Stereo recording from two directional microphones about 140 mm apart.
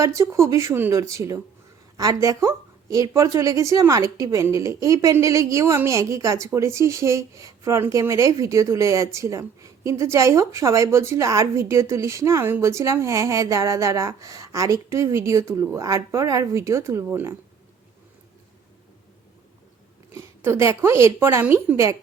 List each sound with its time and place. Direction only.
0.0 s a woman's voice: 20° right (ahead or behind)
20.1 s a woman's voice: 20° right (ahead or behind)